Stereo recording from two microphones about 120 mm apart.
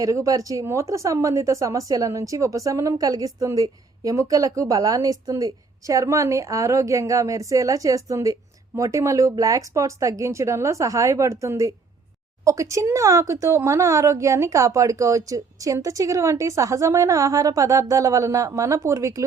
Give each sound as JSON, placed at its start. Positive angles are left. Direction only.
{"t": 0.0, "sound": "speech", "side_deg": -25}